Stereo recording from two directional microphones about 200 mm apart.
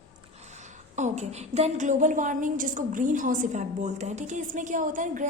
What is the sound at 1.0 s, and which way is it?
A woman's voice, 35° right (ahead or behind).